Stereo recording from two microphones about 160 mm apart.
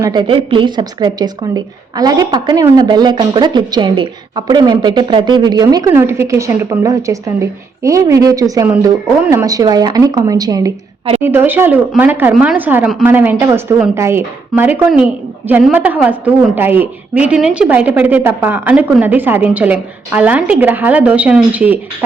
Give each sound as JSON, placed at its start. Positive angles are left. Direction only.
{"t": 0.0, "sound": "a woman's voice", "side_deg": -25}